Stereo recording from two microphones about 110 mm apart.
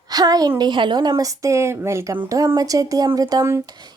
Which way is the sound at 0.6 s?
45° right (ahead or behind).